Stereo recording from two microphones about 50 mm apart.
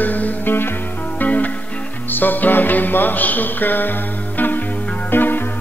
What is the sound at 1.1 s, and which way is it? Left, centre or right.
Music, left.